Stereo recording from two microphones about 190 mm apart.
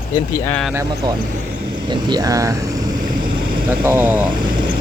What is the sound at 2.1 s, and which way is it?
Speech, 20° right (ahead or behind).